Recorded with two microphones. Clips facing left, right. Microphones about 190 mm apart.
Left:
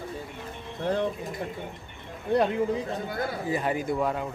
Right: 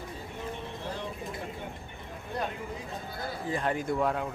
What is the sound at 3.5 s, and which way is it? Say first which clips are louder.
Speech: left 1 dB; 5° left (ahead or behind).